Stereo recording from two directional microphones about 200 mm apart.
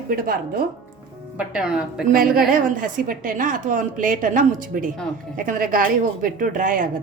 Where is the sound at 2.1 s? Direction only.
45° right (ahead or behind).